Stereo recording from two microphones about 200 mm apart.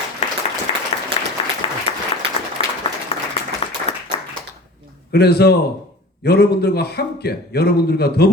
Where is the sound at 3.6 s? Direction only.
30° left (ahead or behind).